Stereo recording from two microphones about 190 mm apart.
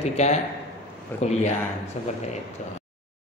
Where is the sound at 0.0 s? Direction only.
35° left (ahead or behind).